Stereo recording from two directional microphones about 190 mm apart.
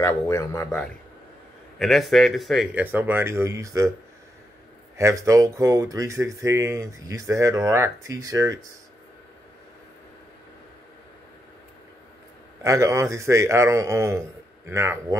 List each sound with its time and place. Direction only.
0.0 s speech: 15° left (ahead or behind)
1.8 s speech: centre (ahead or behind); by 3.9 s 15° right (ahead or behind)
4.9 s speech: 15° right (ahead or behind)
12.6 s speech: 15° right (ahead or behind)